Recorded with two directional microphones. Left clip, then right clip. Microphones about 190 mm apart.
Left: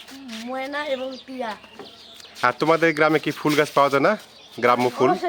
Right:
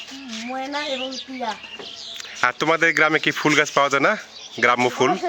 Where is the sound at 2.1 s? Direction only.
Centre (ahead or behind).